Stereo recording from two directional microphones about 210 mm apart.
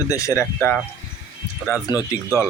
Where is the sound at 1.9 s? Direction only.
15° left (ahead or behind).